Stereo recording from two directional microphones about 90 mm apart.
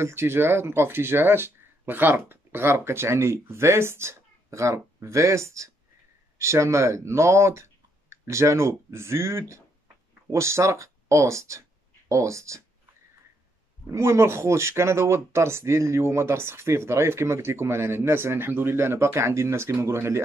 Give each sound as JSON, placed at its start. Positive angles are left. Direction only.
{"t": 0.0, "sound": "speech", "side_deg": -30}
{"t": 13.8, "sound": "speech", "side_deg": -30}